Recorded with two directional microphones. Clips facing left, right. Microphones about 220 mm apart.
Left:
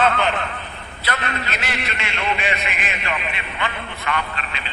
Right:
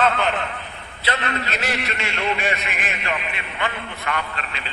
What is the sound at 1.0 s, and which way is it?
A man's voice, 35° right (ahead or behind).